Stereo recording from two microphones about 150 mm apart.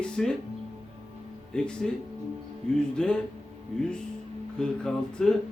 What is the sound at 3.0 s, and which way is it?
Speech, 5° left (ahead or behind).